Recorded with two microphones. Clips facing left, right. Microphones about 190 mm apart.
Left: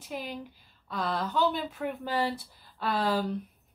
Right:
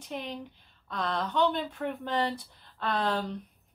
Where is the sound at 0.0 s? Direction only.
5° left (ahead or behind).